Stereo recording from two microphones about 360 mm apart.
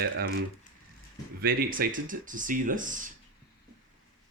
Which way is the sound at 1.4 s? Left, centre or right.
Right.